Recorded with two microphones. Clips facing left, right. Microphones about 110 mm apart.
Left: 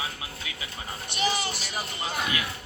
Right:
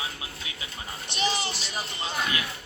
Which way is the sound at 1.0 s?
20° right (ahead or behind).